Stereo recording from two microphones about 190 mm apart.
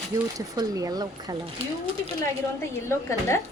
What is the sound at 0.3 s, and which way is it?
Speech, 20° right (ahead or behind).